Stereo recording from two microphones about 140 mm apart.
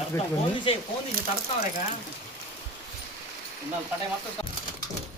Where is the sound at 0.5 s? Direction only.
40° left (ahead or behind).